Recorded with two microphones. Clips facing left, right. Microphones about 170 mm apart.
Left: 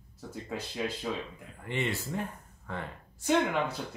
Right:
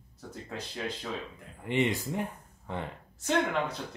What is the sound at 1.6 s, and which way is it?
Speech, 15° right (ahead or behind).